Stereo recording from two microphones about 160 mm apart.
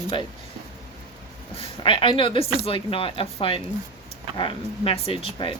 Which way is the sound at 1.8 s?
30° left (ahead or behind).